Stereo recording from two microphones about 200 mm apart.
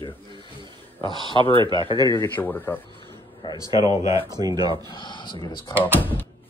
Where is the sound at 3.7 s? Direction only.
20° right (ahead or behind).